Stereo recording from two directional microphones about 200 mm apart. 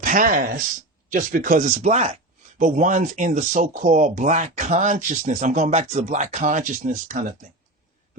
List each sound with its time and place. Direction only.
0.0 s speech: 40° right (ahead or behind)